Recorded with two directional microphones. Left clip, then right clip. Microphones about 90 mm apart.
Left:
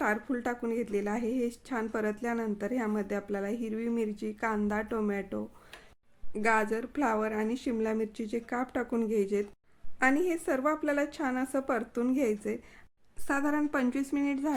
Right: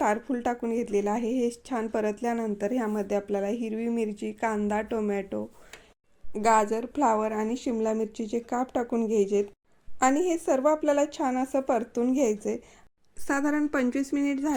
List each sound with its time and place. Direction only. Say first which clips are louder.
0.0 s a woman's voice: right 4 dB; 30° right (ahead or behind)
6.4 s a woman's voice: right 5 dB; 35° right (ahead or behind)